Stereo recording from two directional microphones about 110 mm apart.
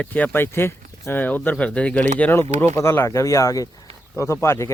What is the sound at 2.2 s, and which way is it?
Speech, 20° left (ahead or behind).